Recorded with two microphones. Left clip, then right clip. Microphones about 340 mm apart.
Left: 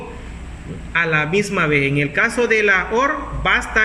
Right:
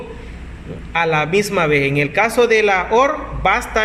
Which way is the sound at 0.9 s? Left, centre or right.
Centre.